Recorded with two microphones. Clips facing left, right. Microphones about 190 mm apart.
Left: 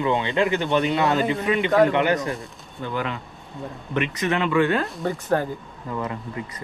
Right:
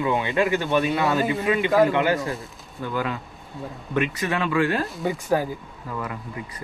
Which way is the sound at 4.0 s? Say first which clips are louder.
Left 1 dB; 20° left (ahead or behind).